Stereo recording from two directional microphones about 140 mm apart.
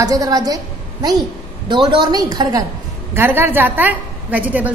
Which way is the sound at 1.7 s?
35° right (ahead or behind).